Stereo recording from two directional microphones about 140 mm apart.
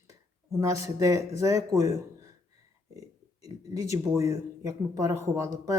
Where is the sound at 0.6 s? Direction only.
20° right (ahead or behind).